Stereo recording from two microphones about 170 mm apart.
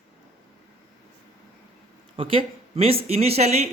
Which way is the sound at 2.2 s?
35° right (ahead or behind).